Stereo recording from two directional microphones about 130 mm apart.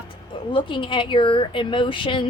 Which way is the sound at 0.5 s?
40° left (ahead or behind).